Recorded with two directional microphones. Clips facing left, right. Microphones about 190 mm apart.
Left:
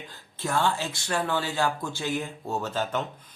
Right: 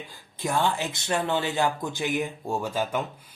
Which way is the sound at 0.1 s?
15° right (ahead or behind).